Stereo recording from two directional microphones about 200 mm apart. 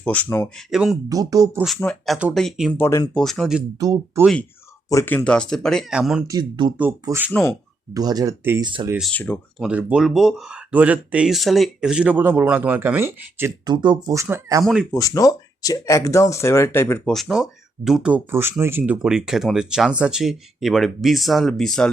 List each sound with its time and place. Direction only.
0.0 s speech: 5° left (ahead or behind)
0.7 s speech: centre (ahead or behind)
1.1 s speech: 15° right (ahead or behind)
1.6 s speech: 5° left (ahead or behind)
2.7 s speech: 15° left (ahead or behind)
3.2 s speech: centre (ahead or behind)
3.8 s speech: 15° right (ahead or behind)
4.9 s speech: 10° left (ahead or behind); by 6.2 s 5° right (ahead or behind)
6.2 s speech: 20° right (ahead or behind)
9.0 s speech: 5° left (ahead or behind)
9.6 s speech: 5° right (ahead or behind)
14.6 s speech: centre (ahead or behind)
14.8 s speech: 15° left (ahead or behind)
17.2 s speech: 5° right (ahead or behind)